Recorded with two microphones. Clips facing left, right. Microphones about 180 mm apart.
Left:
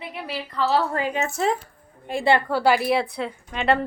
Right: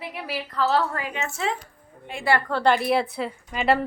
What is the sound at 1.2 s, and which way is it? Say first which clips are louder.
A woman's voice: left 4 dB; 40° left (ahead or behind).